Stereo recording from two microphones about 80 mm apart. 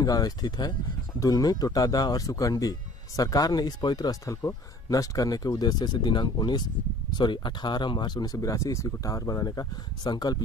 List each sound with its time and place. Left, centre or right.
0.0 s speech: left
10.0 s speech: left